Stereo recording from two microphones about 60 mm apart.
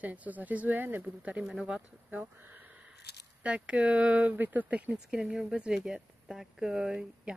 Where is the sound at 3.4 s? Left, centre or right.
Right.